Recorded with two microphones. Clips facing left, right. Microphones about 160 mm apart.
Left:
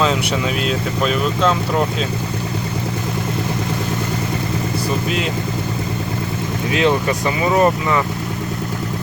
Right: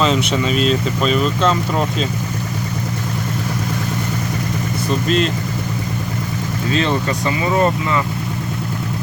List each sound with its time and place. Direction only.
0.0 s speech: 5° left (ahead or behind)
5.0 s speech: 5° left (ahead or behind)
6.7 s speech: 15° left (ahead or behind)